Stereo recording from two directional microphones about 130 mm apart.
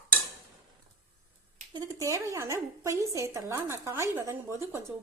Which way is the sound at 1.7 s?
25° right (ahead or behind).